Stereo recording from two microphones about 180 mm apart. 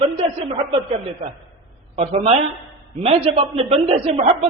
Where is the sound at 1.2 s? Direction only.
40° right (ahead or behind).